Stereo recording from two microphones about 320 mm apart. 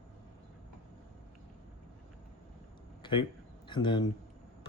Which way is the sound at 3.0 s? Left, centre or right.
Centre.